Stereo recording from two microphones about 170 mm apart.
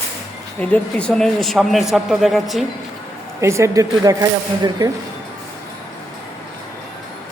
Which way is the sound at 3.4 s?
15° right (ahead or behind).